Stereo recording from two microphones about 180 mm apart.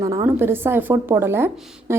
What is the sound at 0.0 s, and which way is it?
A woman's voice, 20° right (ahead or behind).